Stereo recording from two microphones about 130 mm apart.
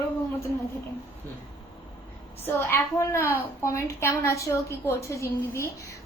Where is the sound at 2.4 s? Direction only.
20° left (ahead or behind).